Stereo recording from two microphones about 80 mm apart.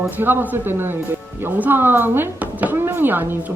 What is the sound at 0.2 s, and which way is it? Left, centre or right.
A woman's voice, right.